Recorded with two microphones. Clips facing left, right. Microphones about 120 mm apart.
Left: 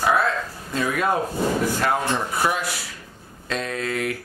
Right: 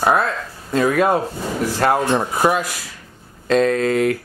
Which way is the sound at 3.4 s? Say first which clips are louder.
Right 11 dB; 45° right (ahead or behind).